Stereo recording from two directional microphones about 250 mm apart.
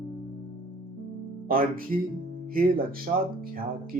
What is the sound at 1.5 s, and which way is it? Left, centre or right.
Speech, right.